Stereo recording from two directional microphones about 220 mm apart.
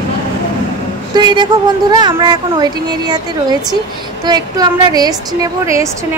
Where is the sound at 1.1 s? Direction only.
20° right (ahead or behind).